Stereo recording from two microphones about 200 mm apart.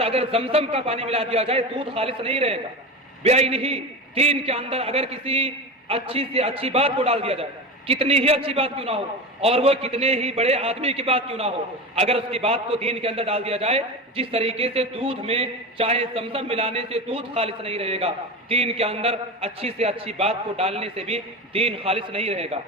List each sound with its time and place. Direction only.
0.0 s a man's voice: 30° right (ahead or behind)